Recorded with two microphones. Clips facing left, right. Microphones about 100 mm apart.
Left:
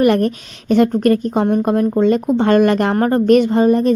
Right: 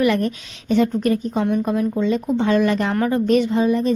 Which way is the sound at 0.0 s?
50° left (ahead or behind).